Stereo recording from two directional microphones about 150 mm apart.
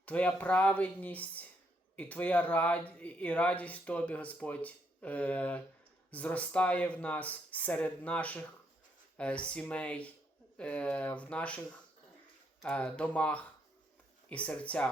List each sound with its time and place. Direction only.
0.0 s speech: 10° left (ahead or behind)